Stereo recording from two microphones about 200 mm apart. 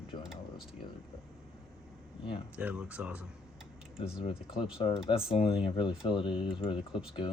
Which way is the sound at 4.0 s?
25° left (ahead or behind).